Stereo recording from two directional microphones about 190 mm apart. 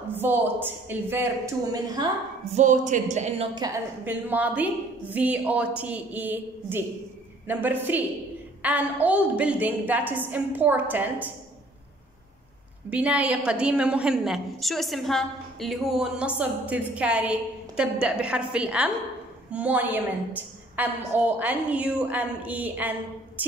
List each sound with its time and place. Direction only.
0.1 s a woman's voice: 10° right (ahead or behind)
2.5 s speech: 40° right (ahead or behind)
4.0 s a woman's voice: 10° right (ahead or behind)
12.9 s a woman's voice: 5° right (ahead or behind)